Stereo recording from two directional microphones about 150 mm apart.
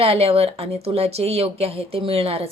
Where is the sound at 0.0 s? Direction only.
40° right (ahead or behind).